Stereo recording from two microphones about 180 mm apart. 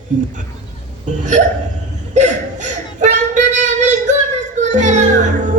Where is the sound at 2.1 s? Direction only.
40° right (ahead or behind).